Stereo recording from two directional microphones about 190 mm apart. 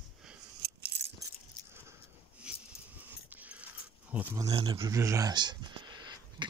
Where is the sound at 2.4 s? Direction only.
5° right (ahead or behind).